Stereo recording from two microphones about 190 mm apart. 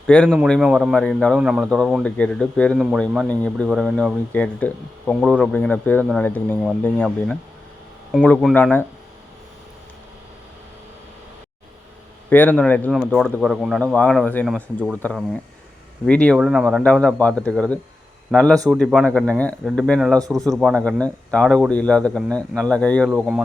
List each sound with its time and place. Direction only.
0.1 s speech: 5° left (ahead or behind)
12.3 s speech: 10° left (ahead or behind)
16.0 s speech: 5° left (ahead or behind)
16.4 s speech: 5° right (ahead or behind)
20.1 s speech: 20° right (ahead or behind)
20.6 s speech: centre (ahead or behind)